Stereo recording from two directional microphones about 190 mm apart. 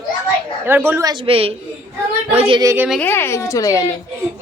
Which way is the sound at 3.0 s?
10° left (ahead or behind).